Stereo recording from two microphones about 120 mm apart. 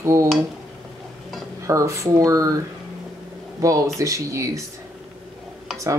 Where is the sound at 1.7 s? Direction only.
25° right (ahead or behind).